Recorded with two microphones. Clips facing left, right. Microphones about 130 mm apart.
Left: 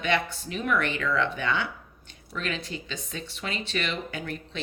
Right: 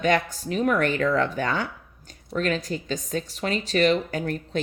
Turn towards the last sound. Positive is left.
turn(degrees=-40)  # may be behind; listen again after turning